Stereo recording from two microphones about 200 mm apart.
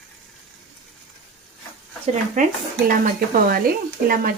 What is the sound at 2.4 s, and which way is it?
Speech, 40° right (ahead or behind).